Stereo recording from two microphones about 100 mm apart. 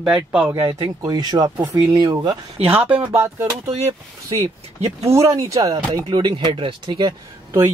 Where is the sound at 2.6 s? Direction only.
90° right.